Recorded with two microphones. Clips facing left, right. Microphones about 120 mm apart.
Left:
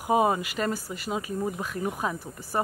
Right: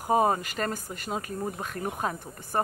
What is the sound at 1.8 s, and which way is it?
Speech, 15° left (ahead or behind).